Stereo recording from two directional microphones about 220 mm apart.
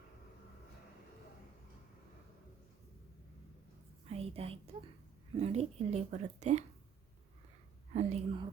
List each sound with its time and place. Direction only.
4.0 s a sound: 25° right (ahead or behind)
5.3 s speech: 30° right (ahead or behind)
7.9 s speech: 25° right (ahead or behind)